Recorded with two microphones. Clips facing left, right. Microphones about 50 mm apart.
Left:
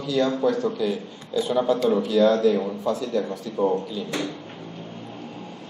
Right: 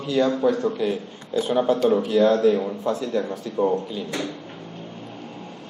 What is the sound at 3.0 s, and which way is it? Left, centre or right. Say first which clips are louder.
Speech: right 1 dB; centre.